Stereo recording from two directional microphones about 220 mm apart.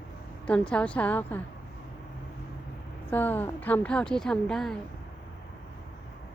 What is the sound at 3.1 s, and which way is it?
Speech, 10° left (ahead or behind).